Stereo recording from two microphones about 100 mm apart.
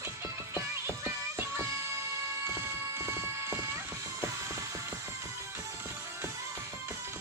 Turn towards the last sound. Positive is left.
turn(degrees=-25)  # may be behind; listen again after turning